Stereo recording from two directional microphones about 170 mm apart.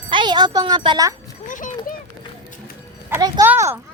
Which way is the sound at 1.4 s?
50° left (ahead or behind).